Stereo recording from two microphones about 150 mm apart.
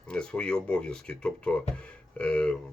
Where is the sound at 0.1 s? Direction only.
5° left (ahead or behind).